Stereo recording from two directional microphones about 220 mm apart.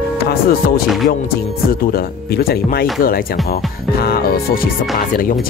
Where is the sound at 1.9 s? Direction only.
45° left (ahead or behind).